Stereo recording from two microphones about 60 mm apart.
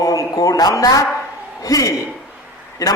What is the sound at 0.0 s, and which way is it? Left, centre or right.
Speech, left.